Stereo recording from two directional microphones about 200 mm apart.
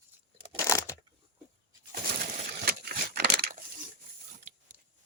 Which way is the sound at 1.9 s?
45° right (ahead or behind).